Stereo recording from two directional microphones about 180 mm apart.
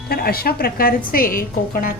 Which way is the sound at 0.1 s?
60° left (ahead or behind).